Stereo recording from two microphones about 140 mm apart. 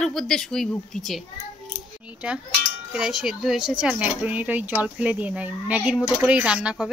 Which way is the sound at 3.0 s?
5° right (ahead or behind).